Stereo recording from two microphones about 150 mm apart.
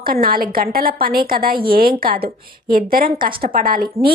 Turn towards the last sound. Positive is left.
turn(degrees=-70)  # may be behind; listen again after turning